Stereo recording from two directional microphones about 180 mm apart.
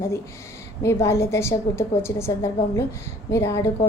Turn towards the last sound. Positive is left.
turn(degrees=15)  # may be behind; listen again after turning